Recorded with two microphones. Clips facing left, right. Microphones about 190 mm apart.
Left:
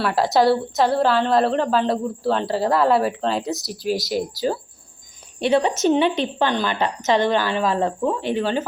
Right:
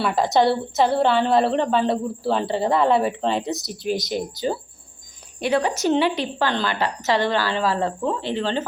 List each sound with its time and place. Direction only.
0.0 s a woman's voice: 5° left (ahead or behind)
5.4 s a woman's voice: 25° left (ahead or behind)